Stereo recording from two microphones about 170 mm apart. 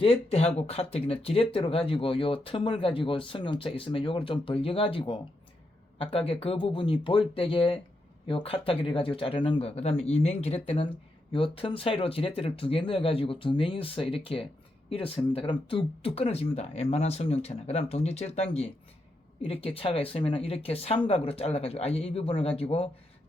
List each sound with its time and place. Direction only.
0.0 s speech: 35° left (ahead or behind)